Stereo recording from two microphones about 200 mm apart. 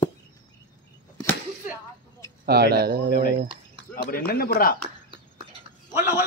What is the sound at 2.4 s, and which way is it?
Speech, 50° right (ahead or behind).